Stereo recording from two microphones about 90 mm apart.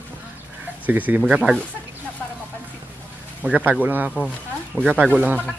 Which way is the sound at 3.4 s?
15° right (ahead or behind).